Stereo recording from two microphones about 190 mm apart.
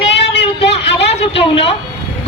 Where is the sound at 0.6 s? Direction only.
65° left (ahead or behind).